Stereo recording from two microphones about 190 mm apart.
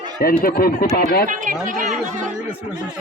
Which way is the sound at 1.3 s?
45° right (ahead or behind).